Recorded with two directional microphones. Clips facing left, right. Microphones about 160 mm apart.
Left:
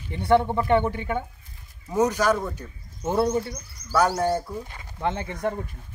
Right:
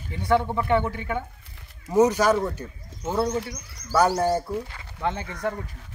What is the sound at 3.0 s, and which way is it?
Speech, 10° left (ahead or behind).